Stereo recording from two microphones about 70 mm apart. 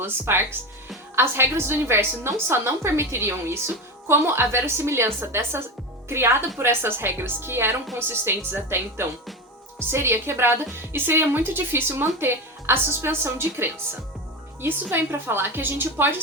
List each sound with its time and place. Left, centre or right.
0.0 s a woman's voice: right